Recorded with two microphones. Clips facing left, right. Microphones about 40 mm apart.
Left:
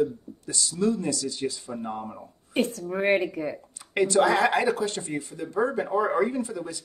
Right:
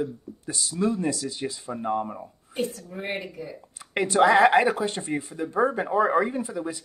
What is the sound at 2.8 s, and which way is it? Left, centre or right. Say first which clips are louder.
Speech: left 9 dB; left.